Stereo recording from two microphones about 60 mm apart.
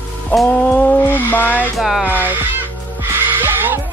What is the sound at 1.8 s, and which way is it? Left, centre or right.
Speech, centre.